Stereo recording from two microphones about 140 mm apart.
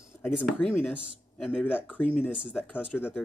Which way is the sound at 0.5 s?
10° left (ahead or behind).